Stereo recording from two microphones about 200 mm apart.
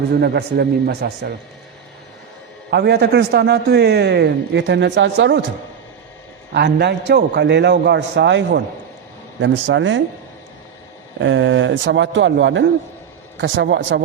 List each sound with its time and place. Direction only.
0.1 s a man's voice: 55° right (ahead or behind)
2.6 s a man's voice: 55° right (ahead or behind)
6.5 s a man's voice: 55° right (ahead or behind)
11.2 s a man's voice: 65° right (ahead or behind)